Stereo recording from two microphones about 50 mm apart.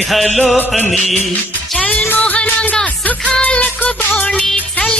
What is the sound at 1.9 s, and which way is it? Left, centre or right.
Music, left.